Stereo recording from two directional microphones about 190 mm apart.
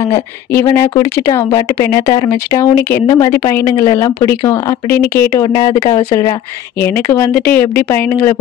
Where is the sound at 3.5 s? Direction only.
15° left (ahead or behind).